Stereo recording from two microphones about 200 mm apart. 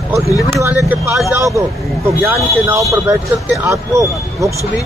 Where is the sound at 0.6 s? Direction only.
15° right (ahead or behind).